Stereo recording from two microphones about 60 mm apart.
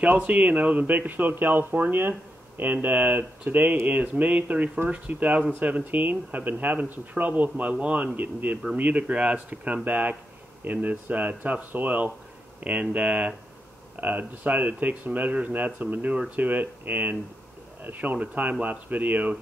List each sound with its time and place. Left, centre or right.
0.0 s a man's voice: right